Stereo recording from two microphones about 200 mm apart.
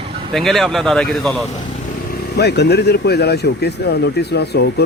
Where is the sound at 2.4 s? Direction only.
55° left (ahead or behind).